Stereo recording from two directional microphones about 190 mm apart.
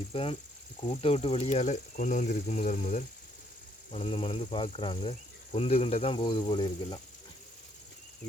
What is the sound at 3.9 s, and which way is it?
Speech, 30° left (ahead or behind).